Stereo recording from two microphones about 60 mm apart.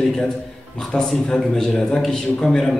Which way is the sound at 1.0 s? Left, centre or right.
Centre.